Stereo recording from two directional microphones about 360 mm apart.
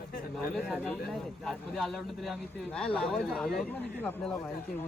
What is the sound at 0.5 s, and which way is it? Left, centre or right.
Speech, centre.